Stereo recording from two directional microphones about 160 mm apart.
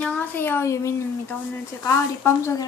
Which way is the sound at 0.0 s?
10° left (ahead or behind).